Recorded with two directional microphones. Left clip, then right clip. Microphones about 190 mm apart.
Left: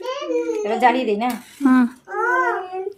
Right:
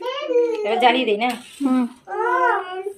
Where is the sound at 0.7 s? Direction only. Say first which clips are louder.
Left 1 dB; 45° left (ahead or behind).